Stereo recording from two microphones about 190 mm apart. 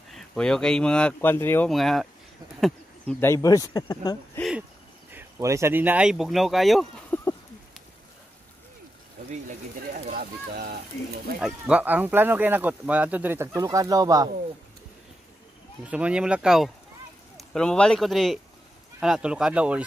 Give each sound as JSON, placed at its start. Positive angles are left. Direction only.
{"t": 0.1, "sound": "speech", "side_deg": 5}
{"t": 1.7, "sound": "speech", "side_deg": 0}
{"t": 4.4, "sound": "a sound", "side_deg": -5}
{"t": 5.1, "sound": "speech", "side_deg": -15}
{"t": 9.3, "sound": "speech", "side_deg": -40}
{"t": 11.4, "sound": "speech", "side_deg": -5}
{"t": 15.8, "sound": "speech", "side_deg": -5}